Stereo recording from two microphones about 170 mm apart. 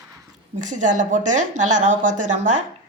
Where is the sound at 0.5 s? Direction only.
45° right (ahead or behind).